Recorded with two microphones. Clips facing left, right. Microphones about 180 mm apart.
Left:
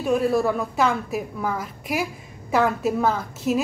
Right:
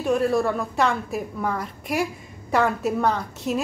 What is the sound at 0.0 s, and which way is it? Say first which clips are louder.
A woman's voice: left 1 dB; centre (ahead or behind).